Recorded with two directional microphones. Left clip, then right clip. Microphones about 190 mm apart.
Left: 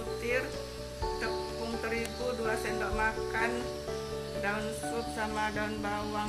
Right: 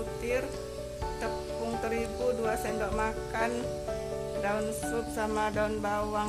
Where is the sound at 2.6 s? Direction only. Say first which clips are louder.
Even; 35° right (ahead or behind).